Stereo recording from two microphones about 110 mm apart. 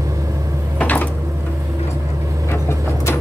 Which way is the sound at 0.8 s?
15° left (ahead or behind).